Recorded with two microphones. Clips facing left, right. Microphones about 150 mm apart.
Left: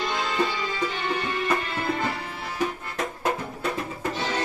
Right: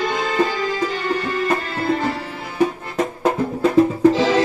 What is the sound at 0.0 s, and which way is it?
Music, 50° right (ahead or behind).